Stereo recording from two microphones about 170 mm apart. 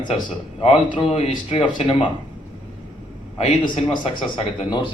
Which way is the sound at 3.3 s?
40° left (ahead or behind).